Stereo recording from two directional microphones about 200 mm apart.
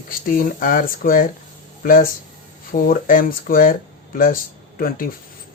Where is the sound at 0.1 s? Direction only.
45° left (ahead or behind).